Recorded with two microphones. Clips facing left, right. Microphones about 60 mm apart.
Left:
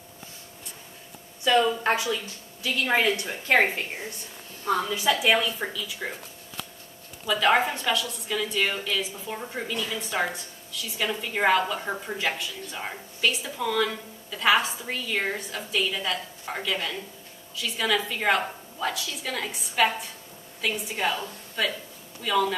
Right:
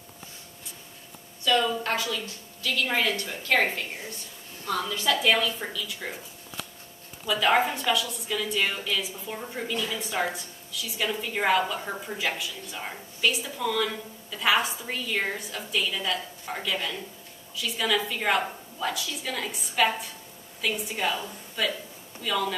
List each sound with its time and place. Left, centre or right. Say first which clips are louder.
1.4 s a woman's voice: left 3 dB; left
7.2 s a woman's voice: left 1 dB; centre